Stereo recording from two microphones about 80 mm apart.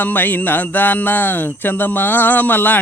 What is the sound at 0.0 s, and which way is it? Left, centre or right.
Speech, left.